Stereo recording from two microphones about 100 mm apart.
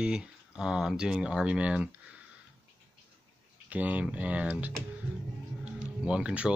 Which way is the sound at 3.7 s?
15° right (ahead or behind).